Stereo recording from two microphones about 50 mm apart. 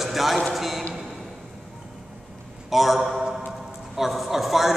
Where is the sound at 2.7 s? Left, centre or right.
Centre.